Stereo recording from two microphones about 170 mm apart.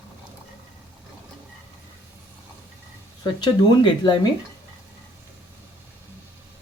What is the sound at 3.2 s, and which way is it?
Speech, 25° left (ahead or behind).